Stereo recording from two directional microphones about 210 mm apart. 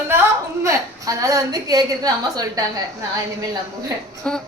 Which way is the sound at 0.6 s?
15° right (ahead or behind).